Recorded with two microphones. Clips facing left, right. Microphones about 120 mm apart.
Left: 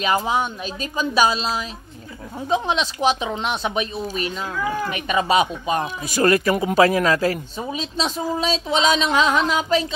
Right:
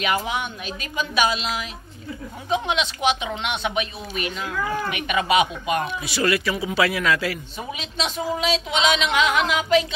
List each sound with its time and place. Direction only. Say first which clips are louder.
0.0 s speech: left 4 dB; 35° left (ahead or behind)